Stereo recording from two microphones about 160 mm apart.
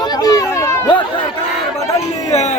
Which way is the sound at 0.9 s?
30° left (ahead or behind).